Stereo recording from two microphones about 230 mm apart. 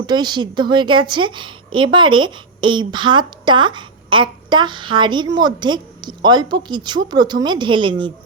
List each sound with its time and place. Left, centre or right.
0.0 s a woman's voice: centre